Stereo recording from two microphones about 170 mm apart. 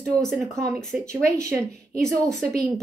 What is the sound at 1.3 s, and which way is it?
Speech, 15° right (ahead or behind).